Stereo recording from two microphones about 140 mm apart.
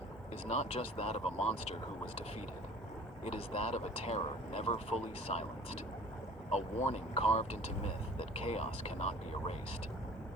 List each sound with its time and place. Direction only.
0.4 s speech: 50° left (ahead or behind)
3.2 s speech: 45° left (ahead or behind)
6.5 s speech: 50° left (ahead or behind)